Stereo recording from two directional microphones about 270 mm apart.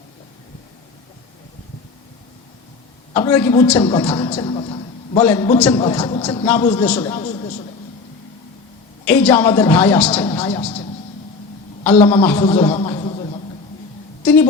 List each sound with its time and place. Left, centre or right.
3.1 s a man's voice: centre
7.0 s a sound: centre
9.0 s a man's voice: centre
10.1 s speech: left
11.9 s speech: left
12.4 s a sound: centre